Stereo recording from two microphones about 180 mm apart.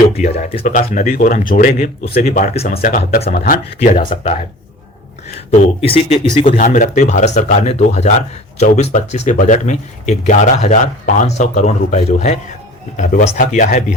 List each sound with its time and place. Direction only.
0.1 s speech: 40° left (ahead or behind)
5.5 s speech: 30° left (ahead or behind)
6.4 s speech: 45° left (ahead or behind)